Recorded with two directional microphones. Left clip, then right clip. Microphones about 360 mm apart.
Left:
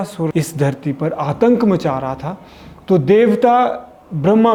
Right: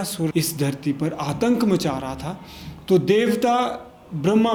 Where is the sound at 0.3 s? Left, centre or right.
Left.